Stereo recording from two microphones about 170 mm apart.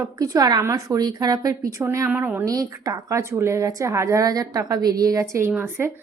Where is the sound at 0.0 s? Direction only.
20° right (ahead or behind).